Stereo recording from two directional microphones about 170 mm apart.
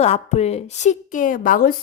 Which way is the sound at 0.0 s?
40° left (ahead or behind).